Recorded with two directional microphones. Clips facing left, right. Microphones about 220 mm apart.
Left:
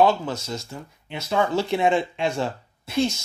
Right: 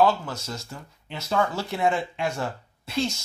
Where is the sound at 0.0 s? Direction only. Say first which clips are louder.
Left 2 dB; 20° left (ahead or behind).